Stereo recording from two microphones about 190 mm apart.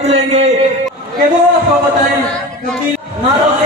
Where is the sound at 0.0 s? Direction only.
35° right (ahead or behind).